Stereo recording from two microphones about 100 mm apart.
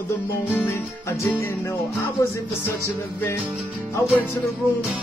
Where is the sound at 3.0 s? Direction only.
30° left (ahead or behind).